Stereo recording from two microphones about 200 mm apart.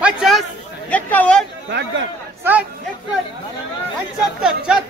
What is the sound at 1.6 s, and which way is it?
Speech, 60° right (ahead or behind).